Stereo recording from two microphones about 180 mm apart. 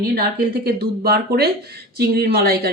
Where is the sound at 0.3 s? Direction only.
60° right (ahead or behind).